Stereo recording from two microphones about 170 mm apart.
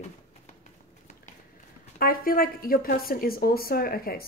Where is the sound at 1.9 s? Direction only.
60° left (ahead or behind).